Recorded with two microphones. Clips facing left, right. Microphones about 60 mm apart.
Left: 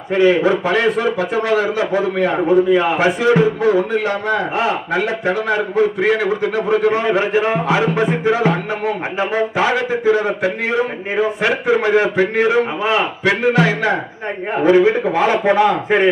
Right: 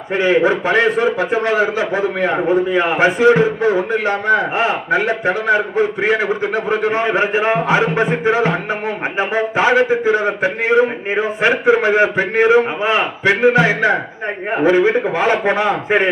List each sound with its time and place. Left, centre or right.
0.2 s a man's voice: right